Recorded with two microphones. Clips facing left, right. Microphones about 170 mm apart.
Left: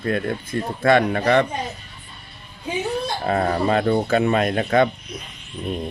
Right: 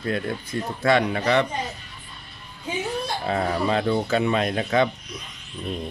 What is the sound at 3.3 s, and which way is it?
Speech, 55° left (ahead or behind).